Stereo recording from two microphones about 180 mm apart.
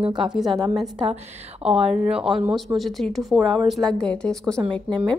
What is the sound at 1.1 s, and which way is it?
Speech, 35° right (ahead or behind).